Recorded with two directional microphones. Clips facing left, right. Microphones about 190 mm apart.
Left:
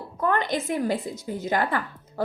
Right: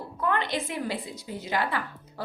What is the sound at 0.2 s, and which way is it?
A woman's voice, 45° left (ahead or behind).